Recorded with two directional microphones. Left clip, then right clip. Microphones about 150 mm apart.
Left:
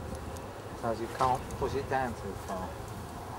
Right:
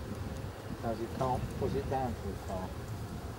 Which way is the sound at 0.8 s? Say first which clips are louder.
Left 5 dB; 15° right (ahead or behind).